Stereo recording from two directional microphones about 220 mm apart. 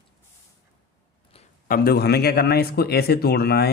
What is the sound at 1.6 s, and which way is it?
A man's voice, 45° left (ahead or behind).